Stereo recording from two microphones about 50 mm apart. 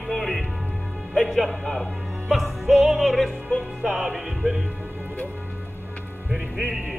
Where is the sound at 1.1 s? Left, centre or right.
Centre.